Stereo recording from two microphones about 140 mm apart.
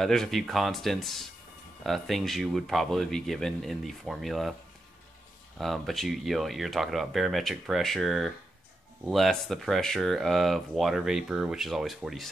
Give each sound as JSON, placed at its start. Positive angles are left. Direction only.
{"t": 0.0, "sound": "speech", "side_deg": 0}
{"t": 5.6, "sound": "speech", "side_deg": 0}